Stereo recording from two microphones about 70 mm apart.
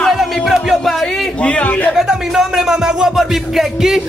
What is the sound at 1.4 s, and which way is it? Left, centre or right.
Speech, centre.